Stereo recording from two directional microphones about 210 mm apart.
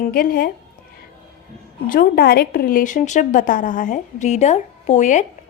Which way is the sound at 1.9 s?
45° left (ahead or behind).